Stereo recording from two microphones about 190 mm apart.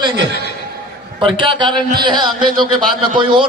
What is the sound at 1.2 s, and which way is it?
A man's voice, 25° right (ahead or behind).